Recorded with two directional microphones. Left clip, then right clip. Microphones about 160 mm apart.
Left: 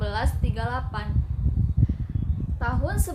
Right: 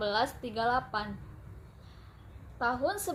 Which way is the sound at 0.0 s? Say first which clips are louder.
Even; 35° left (ahead or behind).